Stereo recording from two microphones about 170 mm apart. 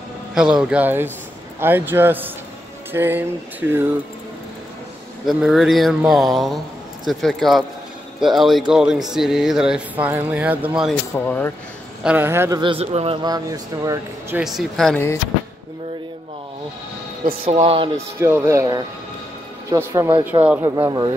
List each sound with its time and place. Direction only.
0.3 s speech: 5° right (ahead or behind)
1.6 s a sound: 10° right (ahead or behind)
5.2 s speech: centre (ahead or behind)
11.1 s speech: 10° left (ahead or behind)
12.0 s a sound: 10° right (ahead or behind)
12.7 s speech: 35° right (ahead or behind); by 14.4 s 20° right (ahead or behind)
14.4 s speech: centre (ahead or behind)
17.5 s speech: 35° right (ahead or behind)
18.2 s a sound: 15° right (ahead or behind)
20.6 s speech: 20° right (ahead or behind)